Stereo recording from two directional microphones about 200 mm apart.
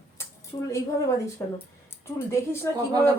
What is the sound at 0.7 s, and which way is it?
A woman's voice, 15° left (ahead or behind).